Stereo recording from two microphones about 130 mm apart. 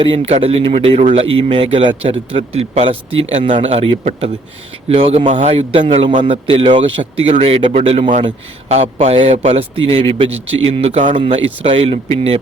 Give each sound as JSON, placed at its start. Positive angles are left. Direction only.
{"t": 0.0, "sound": "speech", "side_deg": -45}